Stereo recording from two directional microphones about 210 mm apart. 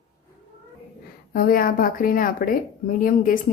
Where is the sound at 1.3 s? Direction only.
45° left (ahead or behind).